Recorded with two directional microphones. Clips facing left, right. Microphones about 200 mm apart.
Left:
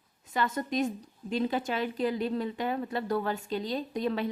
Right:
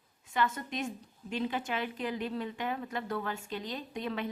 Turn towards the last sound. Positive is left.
turn(degrees=35)  # may be behind; listen again after turning